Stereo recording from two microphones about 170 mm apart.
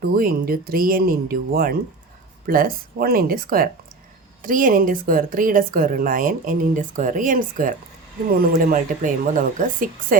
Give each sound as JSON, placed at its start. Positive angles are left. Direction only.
{"t": 0.0, "sound": "a woman's voice", "side_deg": -60}